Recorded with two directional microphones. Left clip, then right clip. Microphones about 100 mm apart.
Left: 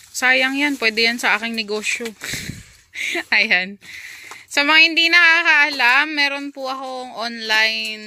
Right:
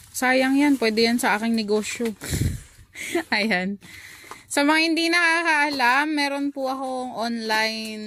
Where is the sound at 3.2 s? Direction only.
45° right (ahead or behind).